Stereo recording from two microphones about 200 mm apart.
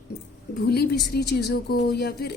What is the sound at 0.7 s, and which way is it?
Speech, 55° left (ahead or behind).